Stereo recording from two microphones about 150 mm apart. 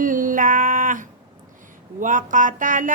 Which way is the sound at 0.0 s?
65° right (ahead or behind).